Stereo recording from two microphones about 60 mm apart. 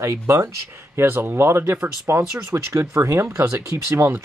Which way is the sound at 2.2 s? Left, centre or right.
Right.